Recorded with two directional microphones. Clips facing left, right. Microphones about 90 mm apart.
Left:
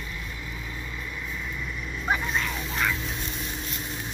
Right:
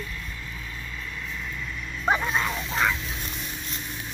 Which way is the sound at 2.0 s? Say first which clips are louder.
Right 3 dB; 35° right (ahead or behind).